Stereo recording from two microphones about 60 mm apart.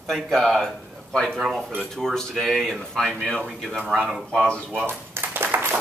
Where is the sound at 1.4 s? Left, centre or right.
Centre.